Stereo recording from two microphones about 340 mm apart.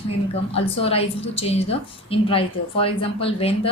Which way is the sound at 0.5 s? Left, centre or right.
Centre.